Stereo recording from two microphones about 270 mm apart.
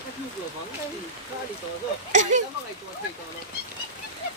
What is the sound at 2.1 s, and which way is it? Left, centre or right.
Speech, right.